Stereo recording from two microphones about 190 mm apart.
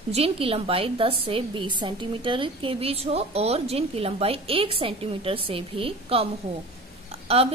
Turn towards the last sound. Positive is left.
turn(degrees=-30)  # may be behind; listen again after turning